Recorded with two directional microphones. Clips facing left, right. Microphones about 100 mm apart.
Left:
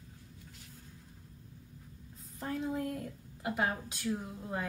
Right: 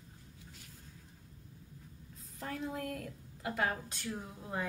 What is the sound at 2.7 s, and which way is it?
A woman's voice, 20° left (ahead or behind).